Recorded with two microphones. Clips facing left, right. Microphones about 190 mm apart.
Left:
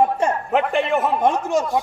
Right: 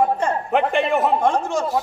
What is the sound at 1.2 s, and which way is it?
Speech, 20° left (ahead or behind).